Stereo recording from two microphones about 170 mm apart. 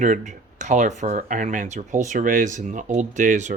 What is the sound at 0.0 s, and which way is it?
Speech, 45° right (ahead or behind).